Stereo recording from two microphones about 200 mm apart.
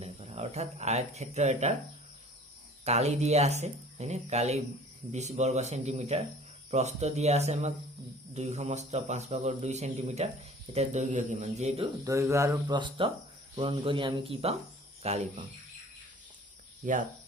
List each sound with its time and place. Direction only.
0.0 s speech: 30° right (ahead or behind)
2.8 s a man's voice: 35° right (ahead or behind)
12.0 s a man's voice: 15° right (ahead or behind); by 15.2 s 30° right (ahead or behind)
16.8 s speech: 45° right (ahead or behind)